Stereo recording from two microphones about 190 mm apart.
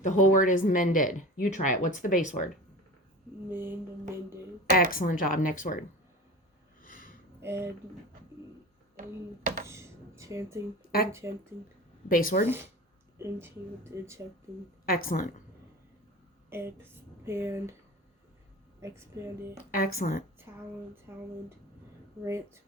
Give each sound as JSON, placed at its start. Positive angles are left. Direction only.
{"t": 0.0, "sound": "speech", "side_deg": 40}
{"t": 3.5, "sound": "speech", "side_deg": -10}
{"t": 4.6, "sound": "speech", "side_deg": 50}
{"t": 7.4, "sound": "speech", "side_deg": -15}
{"t": 9.0, "sound": "speech", "side_deg": -45}
{"t": 9.6, "sound": "a sound", "side_deg": -15}
{"t": 12.0, "sound": "speech", "side_deg": 45}
{"t": 13.1, "sound": "speech", "side_deg": -15}
{"t": 14.8, "sound": "speech", "side_deg": 50}
{"t": 16.5, "sound": "speech", "side_deg": -10}
{"t": 18.8, "sound": "speech", "side_deg": -15}
{"t": 19.7, "sound": "speech", "side_deg": 50}
{"t": 20.5, "sound": "speech", "side_deg": -15}